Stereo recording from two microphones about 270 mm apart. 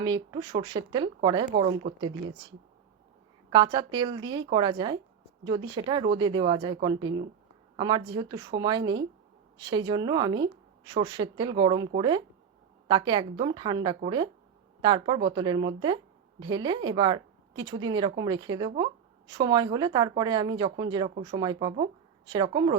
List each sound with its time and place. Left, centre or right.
0.0 s a woman's voice: centre
3.5 s a woman's voice: centre